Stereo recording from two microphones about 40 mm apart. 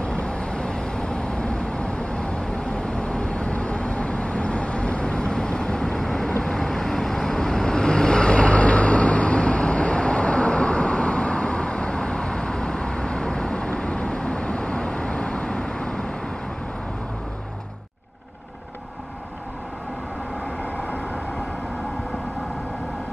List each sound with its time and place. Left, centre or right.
0.0 s vehicle: left
5.9 s vehicle: centre
20.7 s vehicle: left